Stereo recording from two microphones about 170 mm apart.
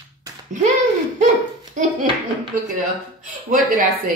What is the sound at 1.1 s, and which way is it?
Dog, 45° right (ahead or behind).